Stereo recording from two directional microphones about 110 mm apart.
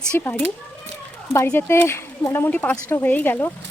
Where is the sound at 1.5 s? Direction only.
20° left (ahead or behind).